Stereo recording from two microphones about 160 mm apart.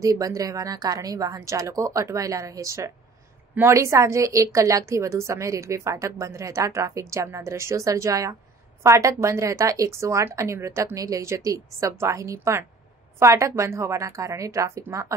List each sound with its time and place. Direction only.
0.0 s a woman's voice: 20° right (ahead or behind)